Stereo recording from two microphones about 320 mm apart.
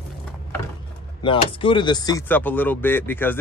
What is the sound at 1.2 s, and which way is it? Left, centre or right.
Speech, centre.